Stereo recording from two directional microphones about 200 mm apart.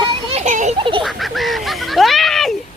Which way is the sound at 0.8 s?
25° right (ahead or behind).